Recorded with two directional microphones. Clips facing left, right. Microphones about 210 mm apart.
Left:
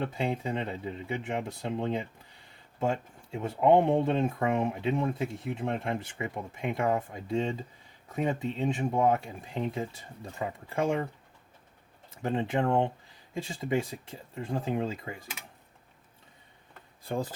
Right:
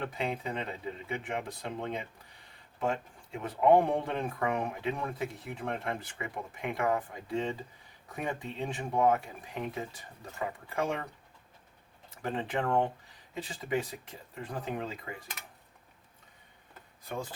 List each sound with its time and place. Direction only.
0.0 s speech: 25° left (ahead or behind)
12.2 s speech: 25° left (ahead or behind)
17.0 s speech: 35° left (ahead or behind)